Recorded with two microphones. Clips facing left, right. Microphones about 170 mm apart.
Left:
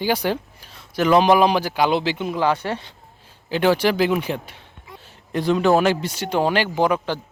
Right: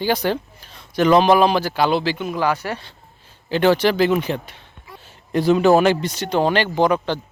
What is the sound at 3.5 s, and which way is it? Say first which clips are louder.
Speech: right 2 dB; 10° left (ahead or behind).